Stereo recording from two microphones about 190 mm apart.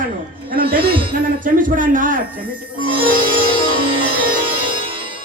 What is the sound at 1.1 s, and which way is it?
A man's voice, 45° right (ahead or behind).